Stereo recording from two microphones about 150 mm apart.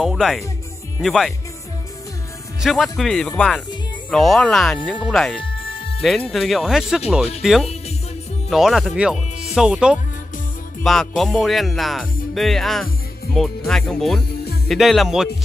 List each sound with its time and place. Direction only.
0.0 s speech: centre (ahead or behind)
2.6 s speech: centre (ahead or behind)
5.4 s music: 35° left (ahead or behind)
6.0 s speech: centre (ahead or behind)